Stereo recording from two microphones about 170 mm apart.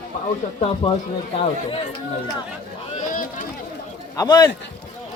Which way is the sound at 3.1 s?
50° left (ahead or behind).